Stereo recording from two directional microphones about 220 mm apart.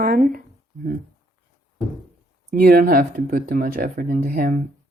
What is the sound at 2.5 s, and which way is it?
A woman's voice, 45° right (ahead or behind).